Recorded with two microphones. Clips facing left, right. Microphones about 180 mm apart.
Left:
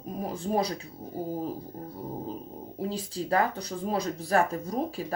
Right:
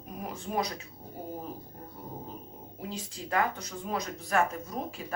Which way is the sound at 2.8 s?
35° left (ahead or behind).